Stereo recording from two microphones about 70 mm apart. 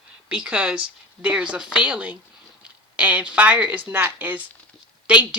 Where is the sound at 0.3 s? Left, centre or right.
Centre.